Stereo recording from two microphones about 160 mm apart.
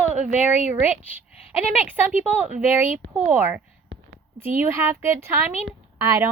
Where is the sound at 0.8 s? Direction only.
10° right (ahead or behind).